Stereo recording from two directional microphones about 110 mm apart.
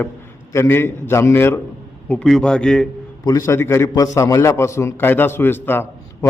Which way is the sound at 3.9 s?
30° left (ahead or behind).